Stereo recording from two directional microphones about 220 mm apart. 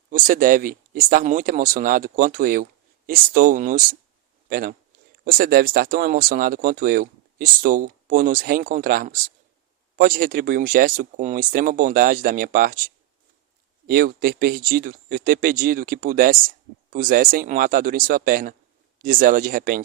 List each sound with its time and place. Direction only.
0.1 s speech: 40° right (ahead or behind)